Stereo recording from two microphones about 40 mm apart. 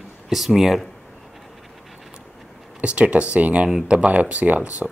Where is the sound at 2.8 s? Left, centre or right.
Right.